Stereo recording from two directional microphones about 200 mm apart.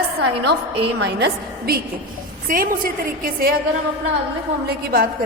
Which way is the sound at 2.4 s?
45° right (ahead or behind).